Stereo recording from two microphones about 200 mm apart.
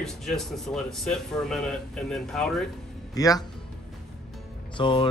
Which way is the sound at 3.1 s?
20° left (ahead or behind).